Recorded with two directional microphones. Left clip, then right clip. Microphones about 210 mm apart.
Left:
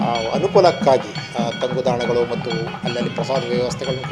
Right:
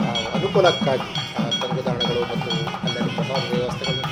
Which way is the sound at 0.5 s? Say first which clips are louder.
Left 4 dB; 35° left (ahead or behind).